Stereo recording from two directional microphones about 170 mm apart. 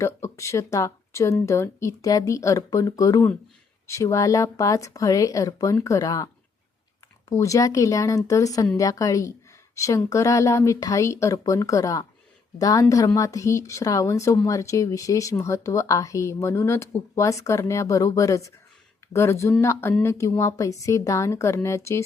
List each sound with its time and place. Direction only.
0.0 s a woman's voice: 15° left (ahead or behind)